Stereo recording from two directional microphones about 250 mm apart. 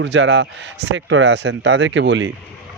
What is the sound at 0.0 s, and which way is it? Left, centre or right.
Speech, right.